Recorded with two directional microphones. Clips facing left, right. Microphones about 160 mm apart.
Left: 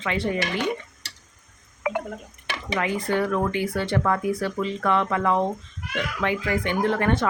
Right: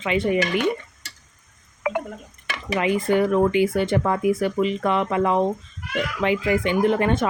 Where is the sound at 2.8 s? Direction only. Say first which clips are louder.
Right 5 dB; 20° right (ahead or behind).